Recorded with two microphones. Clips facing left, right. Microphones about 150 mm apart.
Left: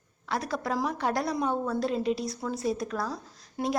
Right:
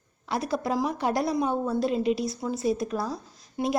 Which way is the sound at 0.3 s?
10° right (ahead or behind).